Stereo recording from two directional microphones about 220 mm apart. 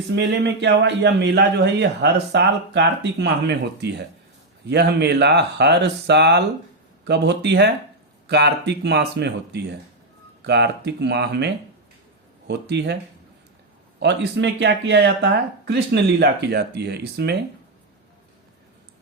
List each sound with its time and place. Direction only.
0.2 s a man's voice: 50° right (ahead or behind)
14.0 s a man's voice: 50° right (ahead or behind)